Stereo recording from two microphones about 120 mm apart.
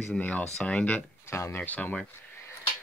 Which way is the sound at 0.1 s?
10° left (ahead or behind).